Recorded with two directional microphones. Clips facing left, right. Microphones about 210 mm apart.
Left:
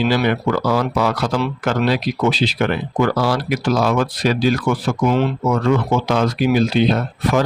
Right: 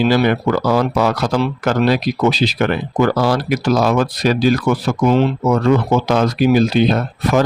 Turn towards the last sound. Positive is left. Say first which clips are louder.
# right 2 dB
turn(degrees=-45)  # may be behind; listen again after turning